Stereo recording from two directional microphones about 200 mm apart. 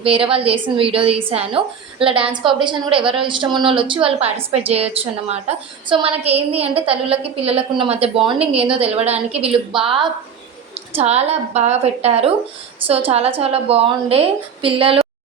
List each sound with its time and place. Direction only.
0.0 s a woman's voice: 25° right (ahead or behind)